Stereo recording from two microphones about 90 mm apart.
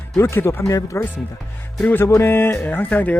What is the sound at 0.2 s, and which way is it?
Speech, 25° left (ahead or behind).